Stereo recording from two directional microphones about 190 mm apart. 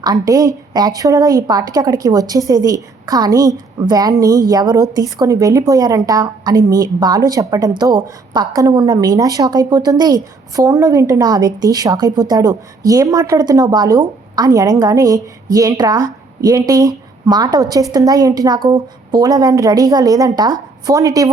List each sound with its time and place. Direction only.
0.0 s a woman's voice: 20° right (ahead or behind)